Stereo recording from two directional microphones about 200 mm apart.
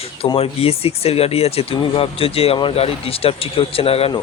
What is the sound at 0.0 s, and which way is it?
Speech, 30° left (ahead or behind).